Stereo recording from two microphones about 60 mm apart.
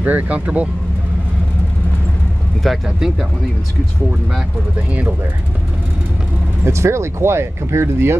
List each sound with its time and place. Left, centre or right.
0.0 s speech: right
2.6 s speech: centre
6.6 s speech: right